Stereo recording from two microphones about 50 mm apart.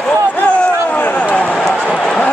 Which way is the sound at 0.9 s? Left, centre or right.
Left.